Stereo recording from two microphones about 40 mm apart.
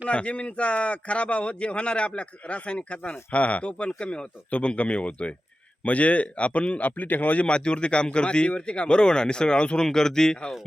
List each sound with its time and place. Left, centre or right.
0.1 s speech: left
7.4 s speech: left